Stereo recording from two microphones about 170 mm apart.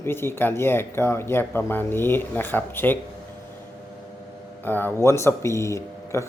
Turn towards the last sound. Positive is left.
turn(degrees=15)  # may be behind; listen again after turning